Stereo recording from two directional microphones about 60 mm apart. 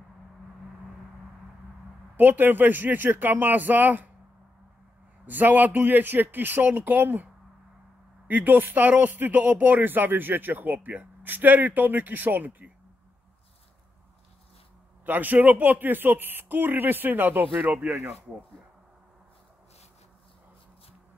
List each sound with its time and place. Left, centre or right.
2.1 s speech: right
5.2 s speech: right
8.3 s speech: right
15.0 s speech: right